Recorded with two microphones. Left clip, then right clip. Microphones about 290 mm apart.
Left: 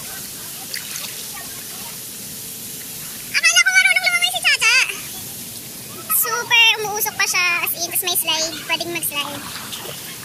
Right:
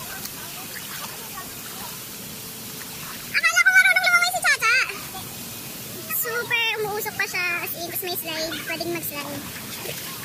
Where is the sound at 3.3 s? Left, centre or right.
Centre.